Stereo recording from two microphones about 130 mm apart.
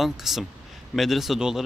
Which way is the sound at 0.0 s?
Centre (ahead or behind).